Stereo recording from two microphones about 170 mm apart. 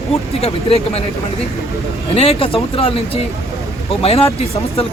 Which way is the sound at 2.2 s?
35° left (ahead or behind).